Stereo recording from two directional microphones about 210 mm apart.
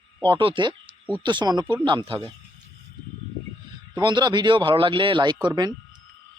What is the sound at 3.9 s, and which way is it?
Speech, 20° right (ahead or behind).